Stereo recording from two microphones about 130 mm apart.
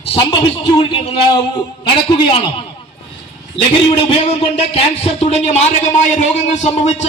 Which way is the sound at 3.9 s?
50° left (ahead or behind).